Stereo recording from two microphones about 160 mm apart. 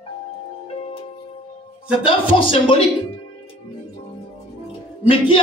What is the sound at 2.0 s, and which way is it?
Speech, 35° left (ahead or behind).